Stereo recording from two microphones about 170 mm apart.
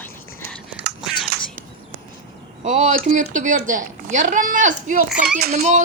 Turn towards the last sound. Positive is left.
turn(degrees=-40)  # may be behind; listen again after turning